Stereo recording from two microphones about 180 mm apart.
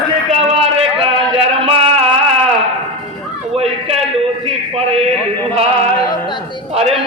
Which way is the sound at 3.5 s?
35° right (ahead or behind).